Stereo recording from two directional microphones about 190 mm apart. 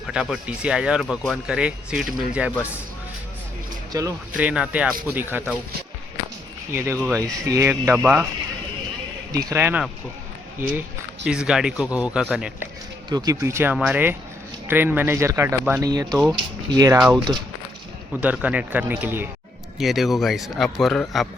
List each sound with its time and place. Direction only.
0.1 s speech: 5° right (ahead or behind)
3.9 s speech: 20° right (ahead or behind)
4.4 s speech: 5° right (ahead or behind)
6.7 s speech: 15° right (ahead or behind)
9.3 s speech: 15° right (ahead or behind)
11.3 s speech: 5° right (ahead or behind)
13.1 s speech: 20° right (ahead or behind)
18.1 s speech: 10° right (ahead or behind)